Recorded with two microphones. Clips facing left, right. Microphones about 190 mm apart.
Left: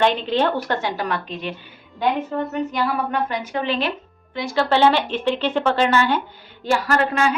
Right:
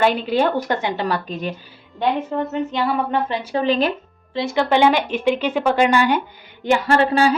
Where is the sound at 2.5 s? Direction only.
25° right (ahead or behind); by 3.9 s 40° right (ahead or behind).